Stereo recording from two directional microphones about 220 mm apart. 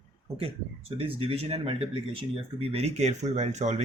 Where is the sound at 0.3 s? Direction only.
25° right (ahead or behind).